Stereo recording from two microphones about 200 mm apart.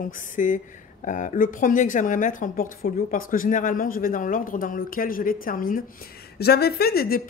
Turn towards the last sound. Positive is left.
turn(degrees=50)  # may be behind; listen again after turning